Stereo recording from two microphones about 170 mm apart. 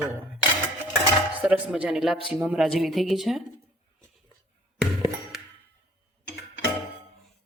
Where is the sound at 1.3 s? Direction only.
5° right (ahead or behind).